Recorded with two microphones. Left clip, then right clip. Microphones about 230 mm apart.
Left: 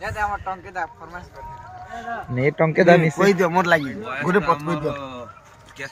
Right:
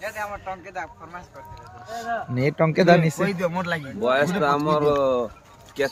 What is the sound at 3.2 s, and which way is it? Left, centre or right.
Speech, left.